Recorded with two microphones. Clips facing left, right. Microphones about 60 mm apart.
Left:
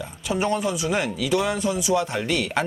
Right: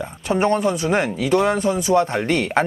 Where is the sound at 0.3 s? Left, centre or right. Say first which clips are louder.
Right 5 dB; right.